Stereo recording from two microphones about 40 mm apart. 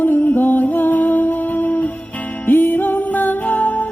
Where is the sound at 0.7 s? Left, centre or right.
Left.